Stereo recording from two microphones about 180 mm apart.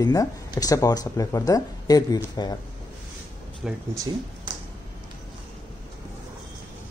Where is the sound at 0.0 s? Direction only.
20° left (ahead or behind).